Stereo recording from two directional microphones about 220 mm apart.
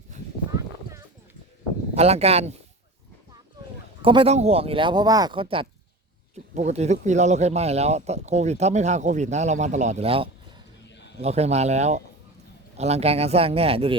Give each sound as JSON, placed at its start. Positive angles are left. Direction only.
{"t": 0.9, "sound": "clip-clop", "side_deg": 40}
{"t": 2.0, "sound": "speech", "side_deg": -30}
{"t": 4.0, "sound": "speech", "side_deg": -25}
{"t": 10.8, "sound": "a sound", "side_deg": 50}
{"t": 11.2, "sound": "speech", "side_deg": -30}